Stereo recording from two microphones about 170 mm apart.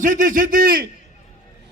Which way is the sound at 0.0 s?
50° right (ahead or behind).